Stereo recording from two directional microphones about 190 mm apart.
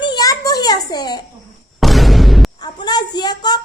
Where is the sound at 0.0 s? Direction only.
20° left (ahead or behind).